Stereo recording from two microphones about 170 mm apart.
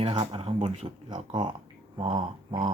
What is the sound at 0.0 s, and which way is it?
Speech, 30° right (ahead or behind).